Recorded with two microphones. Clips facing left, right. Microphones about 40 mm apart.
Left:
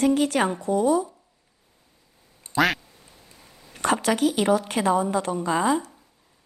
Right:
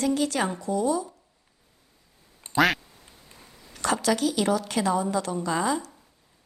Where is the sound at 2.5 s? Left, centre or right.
Centre.